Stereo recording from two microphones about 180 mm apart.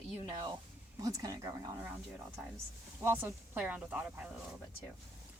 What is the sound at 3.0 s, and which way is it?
Speech, 15° right (ahead or behind).